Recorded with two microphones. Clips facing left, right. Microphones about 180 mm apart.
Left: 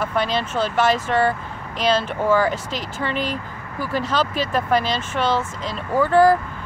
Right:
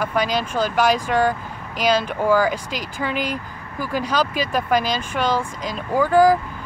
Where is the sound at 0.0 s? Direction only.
10° right (ahead or behind).